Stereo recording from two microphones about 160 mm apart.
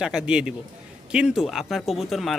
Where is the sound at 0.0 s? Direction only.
5° right (ahead or behind).